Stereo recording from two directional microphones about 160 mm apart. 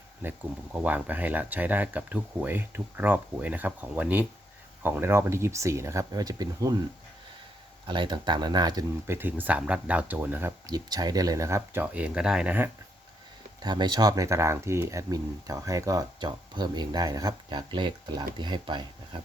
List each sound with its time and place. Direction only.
0.2 s speech: 10° right (ahead or behind)
7.9 s speech: 30° right (ahead or behind); by 10.5 s 10° right (ahead or behind)
10.7 s speech: 25° right (ahead or behind)
13.6 s speech: 25° right (ahead or behind)